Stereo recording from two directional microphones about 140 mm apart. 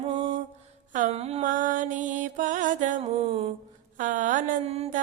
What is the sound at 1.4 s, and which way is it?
Music, 70° right (ahead or behind).